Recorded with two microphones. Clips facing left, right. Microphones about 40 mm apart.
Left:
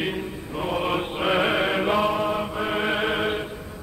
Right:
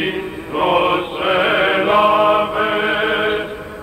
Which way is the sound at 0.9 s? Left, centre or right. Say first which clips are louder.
Right 7 dB; right.